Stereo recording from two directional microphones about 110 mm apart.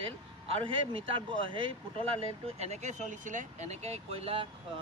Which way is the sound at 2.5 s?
90° right.